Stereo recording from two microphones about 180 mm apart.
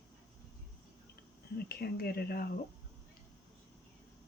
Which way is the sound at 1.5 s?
60° left (ahead or behind).